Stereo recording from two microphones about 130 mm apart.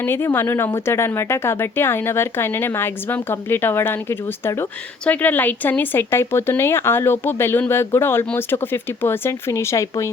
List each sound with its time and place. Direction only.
0.0 s speech: 20° left (ahead or behind)